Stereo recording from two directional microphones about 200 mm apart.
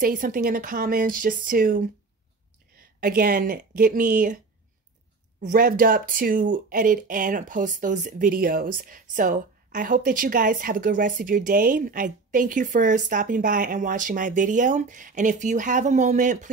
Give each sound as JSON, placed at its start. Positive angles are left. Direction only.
{"t": 0.0, "sound": "speech", "side_deg": -45}
{"t": 5.4, "sound": "speech", "side_deg": -45}